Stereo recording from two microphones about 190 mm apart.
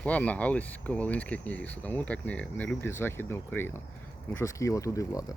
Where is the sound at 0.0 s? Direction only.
5° left (ahead or behind).